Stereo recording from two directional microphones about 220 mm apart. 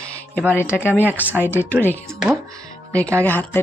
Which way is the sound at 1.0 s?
5° right (ahead or behind).